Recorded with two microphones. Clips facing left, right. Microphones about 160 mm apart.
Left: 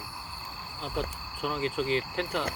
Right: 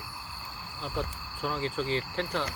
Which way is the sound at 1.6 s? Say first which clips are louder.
Left 3 dB; 35° right (ahead or behind).